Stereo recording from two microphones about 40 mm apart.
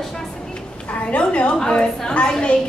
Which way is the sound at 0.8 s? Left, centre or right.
Left.